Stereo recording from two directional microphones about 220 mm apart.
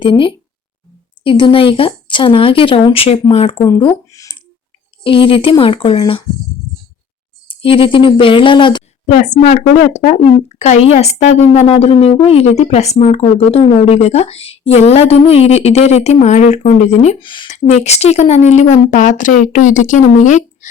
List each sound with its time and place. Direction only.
0.0 s speech: 20° left (ahead or behind)
7.4 s speech: 25° left (ahead or behind)
9.1 s a woman's voice: 35° left (ahead or behind)